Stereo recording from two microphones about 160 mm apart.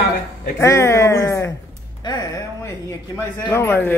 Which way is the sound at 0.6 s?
15° left (ahead or behind).